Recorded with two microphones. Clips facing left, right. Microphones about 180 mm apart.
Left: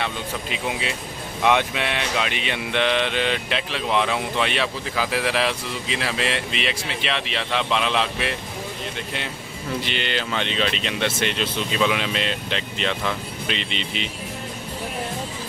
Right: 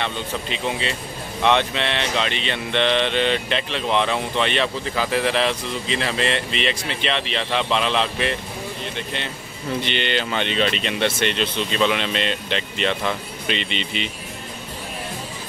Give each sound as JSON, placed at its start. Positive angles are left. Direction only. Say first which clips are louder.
{"t": 0.0, "sound": "speech", "louder": "right 1 dB", "side_deg": 10}